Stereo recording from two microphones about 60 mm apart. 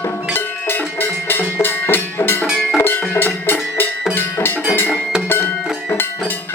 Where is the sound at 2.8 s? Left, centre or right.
Left.